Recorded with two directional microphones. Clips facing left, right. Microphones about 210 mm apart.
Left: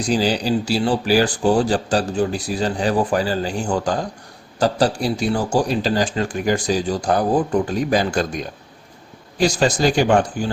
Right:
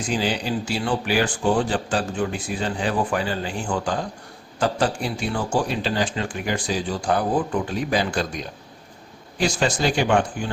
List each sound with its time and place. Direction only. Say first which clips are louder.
0.0 s speech: left 5 dB; 40° left (ahead or behind)
9.4 s speech: left 5 dB; 40° left (ahead or behind)